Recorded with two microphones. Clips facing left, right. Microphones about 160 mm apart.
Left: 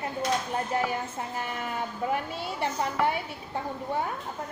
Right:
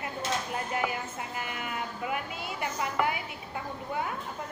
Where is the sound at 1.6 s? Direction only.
35° left (ahead or behind).